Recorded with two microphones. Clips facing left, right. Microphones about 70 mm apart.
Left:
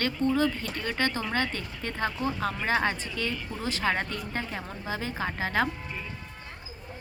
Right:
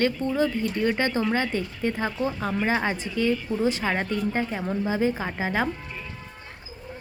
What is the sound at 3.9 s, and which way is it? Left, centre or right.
A woman's voice, centre.